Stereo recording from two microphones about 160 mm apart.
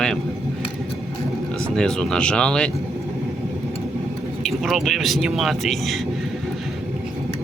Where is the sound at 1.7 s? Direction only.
5° left (ahead or behind).